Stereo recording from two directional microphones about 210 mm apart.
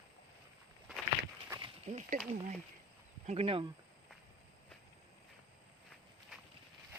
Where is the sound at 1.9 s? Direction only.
35° right (ahead or behind).